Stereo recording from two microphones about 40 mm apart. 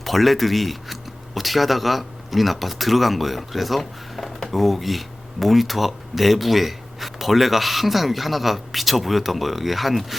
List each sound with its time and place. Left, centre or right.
0.0 s speech: centre